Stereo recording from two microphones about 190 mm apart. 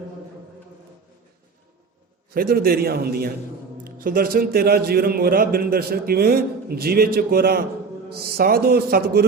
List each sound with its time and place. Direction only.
2.3 s a man's voice: 50° right (ahead or behind)